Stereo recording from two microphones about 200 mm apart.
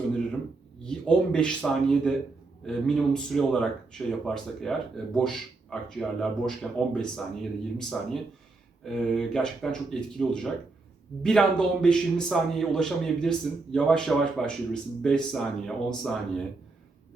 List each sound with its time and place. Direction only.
0.9 s a man's voice: 5° left (ahead or behind)